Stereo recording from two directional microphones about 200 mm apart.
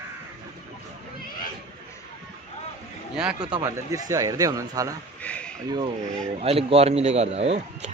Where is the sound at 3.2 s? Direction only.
5° right (ahead or behind).